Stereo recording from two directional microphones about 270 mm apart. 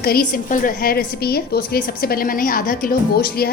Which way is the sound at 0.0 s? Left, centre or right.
Left.